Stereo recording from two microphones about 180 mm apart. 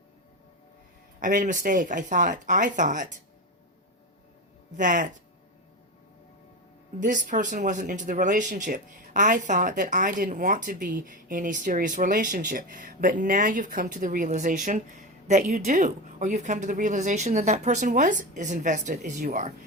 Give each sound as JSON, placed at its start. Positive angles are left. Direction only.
{"t": 1.2, "sound": "speech", "side_deg": -45}
{"t": 4.8, "sound": "speech", "side_deg": -45}
{"t": 7.0, "sound": "speech", "side_deg": -45}